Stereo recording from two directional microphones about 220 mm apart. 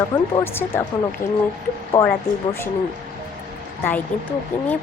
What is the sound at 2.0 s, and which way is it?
Speech, 15° left (ahead or behind).